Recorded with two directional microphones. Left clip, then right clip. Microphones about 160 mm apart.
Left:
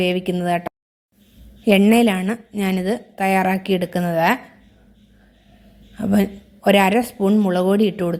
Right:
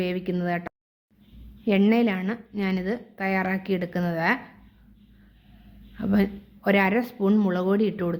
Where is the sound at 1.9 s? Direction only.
35° left (ahead or behind).